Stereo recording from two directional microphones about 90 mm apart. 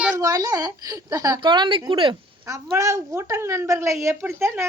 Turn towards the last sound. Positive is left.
turn(degrees=-30)  # may be behind; listen again after turning